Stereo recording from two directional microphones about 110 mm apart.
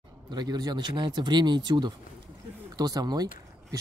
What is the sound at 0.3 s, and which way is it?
Speech, 40° right (ahead or behind).